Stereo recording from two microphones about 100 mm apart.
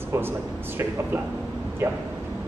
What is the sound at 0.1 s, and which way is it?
Speech, 25° right (ahead or behind).